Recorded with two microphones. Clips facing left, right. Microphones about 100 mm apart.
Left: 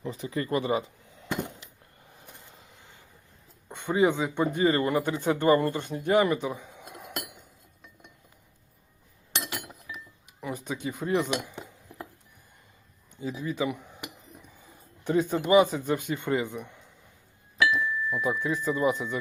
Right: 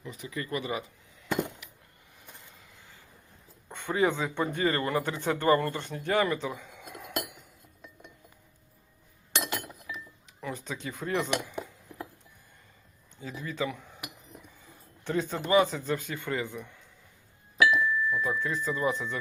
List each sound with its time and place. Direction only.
0.0 s speech: 35° left (ahead or behind)
2.2 s a sound: 25° left (ahead or behind)
3.7 s speech: 20° left (ahead or behind)
10.4 s speech: 15° left (ahead or behind)
13.2 s speech: 15° left (ahead or behind)
15.0 s speech: 15° left (ahead or behind)